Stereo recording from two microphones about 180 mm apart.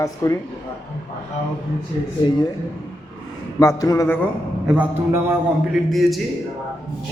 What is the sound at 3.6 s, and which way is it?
Speech, 20° left (ahead or behind).